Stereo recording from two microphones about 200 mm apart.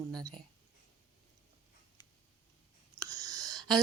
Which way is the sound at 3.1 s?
20° right (ahead or behind).